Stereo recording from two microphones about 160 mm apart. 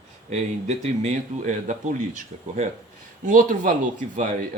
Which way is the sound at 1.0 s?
50° right (ahead or behind).